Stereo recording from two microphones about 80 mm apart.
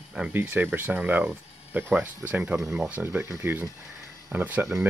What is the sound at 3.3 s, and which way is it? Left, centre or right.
Speech, right.